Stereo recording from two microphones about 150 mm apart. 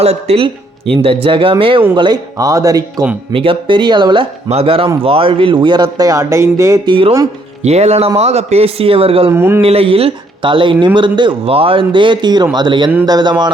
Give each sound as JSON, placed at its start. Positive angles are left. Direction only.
{"t": 0.0, "sound": "speech", "side_deg": -45}
{"t": 3.3, "sound": "speech", "side_deg": -35}
{"t": 6.8, "sound": "speech", "side_deg": -30}
{"t": 7.6, "sound": "speech", "side_deg": -45}
{"t": 9.3, "sound": "a man's voice", "side_deg": -15}
{"t": 9.6, "sound": "speech", "side_deg": -40}